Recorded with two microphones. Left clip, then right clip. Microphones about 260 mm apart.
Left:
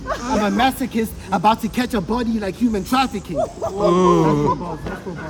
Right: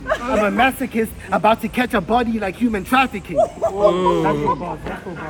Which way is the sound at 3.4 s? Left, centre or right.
Right.